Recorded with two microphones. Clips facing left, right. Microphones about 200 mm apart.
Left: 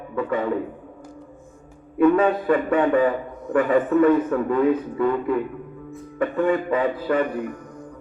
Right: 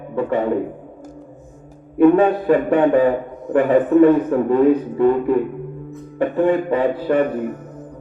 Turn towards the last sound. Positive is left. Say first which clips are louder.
# right 4 dB
turn(degrees=-5)  # may be behind; listen again after turning